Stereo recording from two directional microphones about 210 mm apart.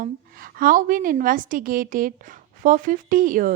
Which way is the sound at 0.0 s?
40° right (ahead or behind).